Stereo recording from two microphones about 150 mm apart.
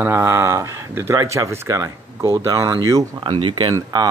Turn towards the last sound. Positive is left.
turn(degrees=-25)  # may be behind; listen again after turning